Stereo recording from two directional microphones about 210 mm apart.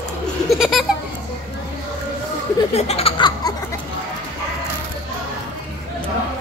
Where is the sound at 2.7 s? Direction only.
30° left (ahead or behind).